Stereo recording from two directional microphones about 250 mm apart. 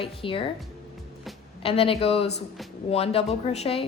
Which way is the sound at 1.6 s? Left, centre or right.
Left.